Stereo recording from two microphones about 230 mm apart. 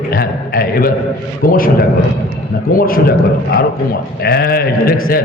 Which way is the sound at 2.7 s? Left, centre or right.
Left.